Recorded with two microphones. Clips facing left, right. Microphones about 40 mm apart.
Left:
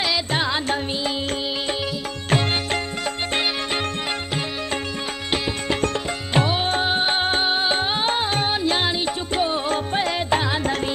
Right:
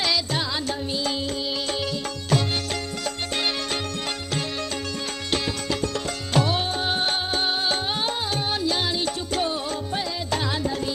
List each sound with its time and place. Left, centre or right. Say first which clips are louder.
0.3 s music: left 4 dB; left
2.2 s music: left 3 dB; left
6.3 s music: left 3 dB; left
7.2 s music: left 5 dB; left
7.4 s music: left 4 dB; left
9.0 s music: left 3 dB; left
9.7 s music: left 6 dB; left
10.3 s music: left 4 dB; left